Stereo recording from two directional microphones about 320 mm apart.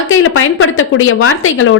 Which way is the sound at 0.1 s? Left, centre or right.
Left.